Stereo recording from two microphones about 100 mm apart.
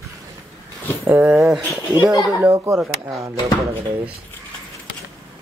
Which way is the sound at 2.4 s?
20° right (ahead or behind).